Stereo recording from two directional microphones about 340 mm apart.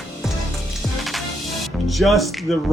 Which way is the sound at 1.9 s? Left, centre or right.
Centre.